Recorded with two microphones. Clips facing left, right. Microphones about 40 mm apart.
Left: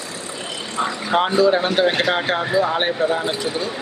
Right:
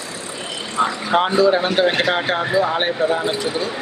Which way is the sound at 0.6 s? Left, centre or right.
Centre.